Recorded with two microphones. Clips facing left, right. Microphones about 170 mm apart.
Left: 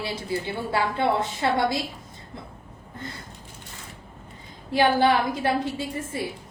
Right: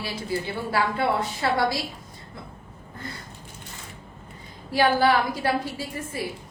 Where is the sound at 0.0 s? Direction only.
25° left (ahead or behind).